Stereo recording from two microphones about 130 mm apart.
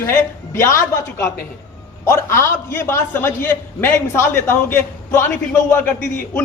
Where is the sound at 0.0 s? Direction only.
20° left (ahead or behind).